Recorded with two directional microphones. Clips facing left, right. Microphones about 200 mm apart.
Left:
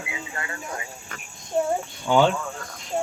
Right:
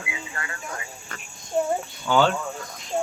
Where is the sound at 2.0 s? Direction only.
15° left (ahead or behind).